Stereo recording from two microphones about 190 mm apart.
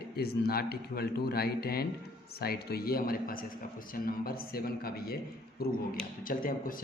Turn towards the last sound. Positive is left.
turn(degrees=45)  # may be behind; listen again after turning